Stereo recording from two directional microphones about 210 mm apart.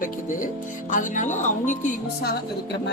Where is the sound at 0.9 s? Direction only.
35° left (ahead or behind).